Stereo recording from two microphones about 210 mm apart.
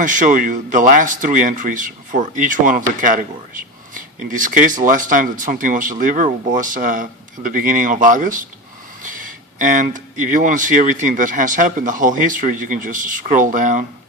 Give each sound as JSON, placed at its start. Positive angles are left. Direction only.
{"t": 0.0, "sound": "speech", "side_deg": -40}